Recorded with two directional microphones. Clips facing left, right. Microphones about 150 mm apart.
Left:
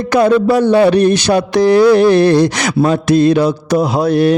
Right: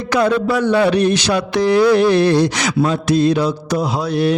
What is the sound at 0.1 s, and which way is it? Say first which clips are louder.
Speech: left 5 dB; 45° left (ahead or behind).